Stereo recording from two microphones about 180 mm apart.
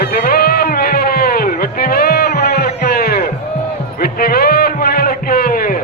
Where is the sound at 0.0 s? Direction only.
60° left (ahead or behind).